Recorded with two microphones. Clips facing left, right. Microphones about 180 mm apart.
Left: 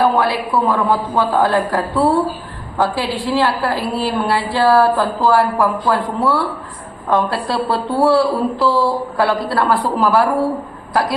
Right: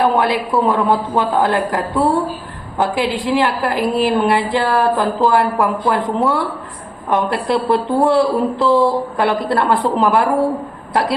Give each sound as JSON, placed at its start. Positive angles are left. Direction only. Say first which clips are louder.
{"t": 0.0, "sound": "a woman's voice", "louder": "even", "side_deg": -20}